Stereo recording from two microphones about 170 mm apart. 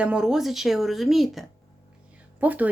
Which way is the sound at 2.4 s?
10° right (ahead or behind).